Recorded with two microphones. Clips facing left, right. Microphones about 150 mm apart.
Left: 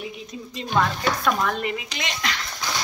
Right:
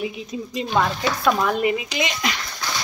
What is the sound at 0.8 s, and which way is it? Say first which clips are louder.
Speech: even; 15° right (ahead or behind).